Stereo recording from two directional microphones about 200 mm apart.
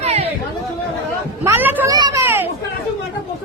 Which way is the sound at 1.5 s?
10° right (ahead or behind).